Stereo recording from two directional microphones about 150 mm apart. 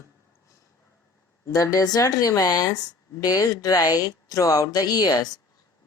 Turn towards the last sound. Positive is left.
turn(degrees=25)  # may be behind; listen again after turning